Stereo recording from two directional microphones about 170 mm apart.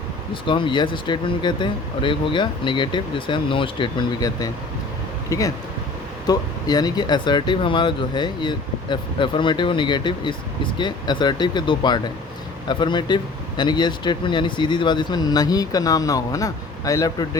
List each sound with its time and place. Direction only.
0.4 s speech: 30° left (ahead or behind)